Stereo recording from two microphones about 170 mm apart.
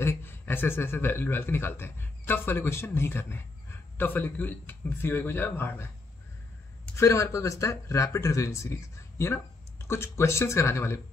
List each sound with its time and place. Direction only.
0.0 s a man's voice: 15° left (ahead or behind)
7.0 s a man's voice: 15° left (ahead or behind)